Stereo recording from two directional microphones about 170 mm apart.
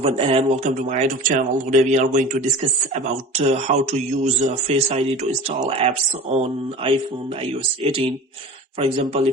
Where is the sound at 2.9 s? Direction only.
40° right (ahead or behind).